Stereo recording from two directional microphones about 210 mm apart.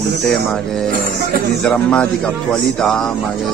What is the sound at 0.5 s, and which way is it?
Speech, centre (ahead or behind).